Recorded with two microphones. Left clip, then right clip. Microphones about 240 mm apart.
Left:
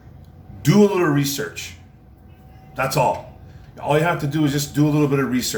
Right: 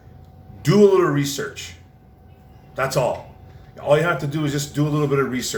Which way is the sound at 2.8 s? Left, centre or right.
Centre.